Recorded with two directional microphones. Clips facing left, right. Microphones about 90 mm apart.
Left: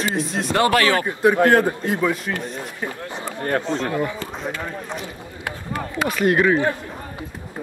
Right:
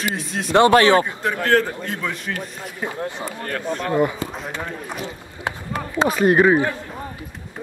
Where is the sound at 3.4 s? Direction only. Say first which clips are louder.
Left 5 dB; 30° left (ahead or behind).